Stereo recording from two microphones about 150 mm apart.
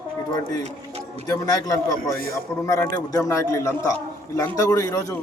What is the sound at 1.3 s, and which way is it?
A man's voice, 25° left (ahead or behind).